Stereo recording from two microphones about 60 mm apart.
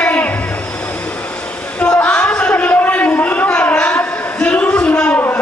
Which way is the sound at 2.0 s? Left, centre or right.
Left.